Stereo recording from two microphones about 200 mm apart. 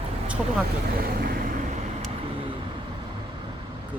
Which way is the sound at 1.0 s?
50° right (ahead or behind).